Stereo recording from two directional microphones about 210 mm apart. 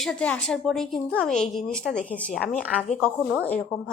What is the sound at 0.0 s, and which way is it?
A woman's voice, 5° left (ahead or behind).